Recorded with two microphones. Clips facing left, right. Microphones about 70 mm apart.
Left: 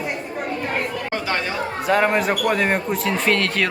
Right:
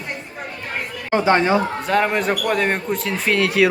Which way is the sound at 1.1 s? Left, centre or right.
Right.